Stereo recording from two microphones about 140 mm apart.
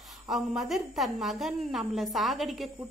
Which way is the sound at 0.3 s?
Centre (ahead or behind).